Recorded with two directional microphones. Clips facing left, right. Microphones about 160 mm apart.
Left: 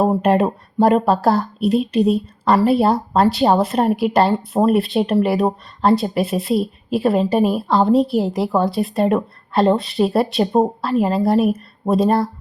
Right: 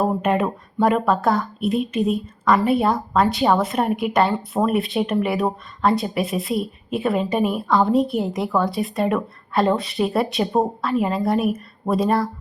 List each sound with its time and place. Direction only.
0.0 s speech: 35° left (ahead or behind)
4.7 s a woman's voice: centre (ahead or behind)
5.0 s speech: 30° left (ahead or behind)
5.9 s a woman's voice: centre (ahead or behind)
6.9 s a woman's voice: 35° left (ahead or behind)
8.0 s a woman's voice: centre (ahead or behind)
8.4 s a woman's voice: 25° left (ahead or behind)
8.7 s a woman's voice: centre (ahead or behind)
9.1 s a woman's voice: 20° left (ahead or behind)
10.0 s speech: 35° left (ahead or behind)